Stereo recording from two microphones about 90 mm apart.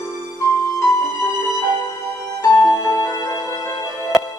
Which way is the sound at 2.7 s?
35° left (ahead or behind).